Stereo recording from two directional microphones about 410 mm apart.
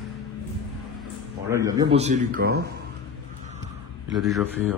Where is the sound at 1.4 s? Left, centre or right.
Centre.